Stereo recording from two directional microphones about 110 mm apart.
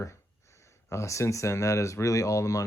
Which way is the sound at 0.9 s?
25° left (ahead or behind).